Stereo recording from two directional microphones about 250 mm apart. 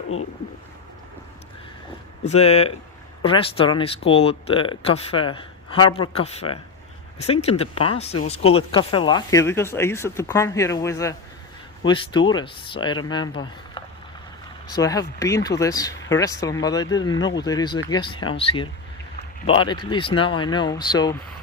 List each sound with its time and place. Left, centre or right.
2.2 s speech: left